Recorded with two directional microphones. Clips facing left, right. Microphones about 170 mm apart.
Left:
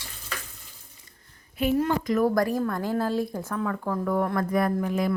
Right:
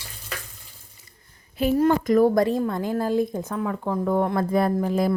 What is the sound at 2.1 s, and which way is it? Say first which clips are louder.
A woman's voice: right 2 dB; 25° right (ahead or behind).